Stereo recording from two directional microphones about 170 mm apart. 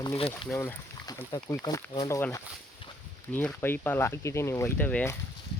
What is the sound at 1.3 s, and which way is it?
Speech, 20° left (ahead or behind).